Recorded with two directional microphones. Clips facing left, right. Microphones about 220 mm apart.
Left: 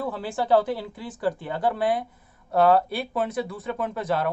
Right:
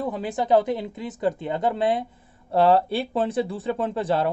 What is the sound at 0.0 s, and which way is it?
Speech, 20° right (ahead or behind).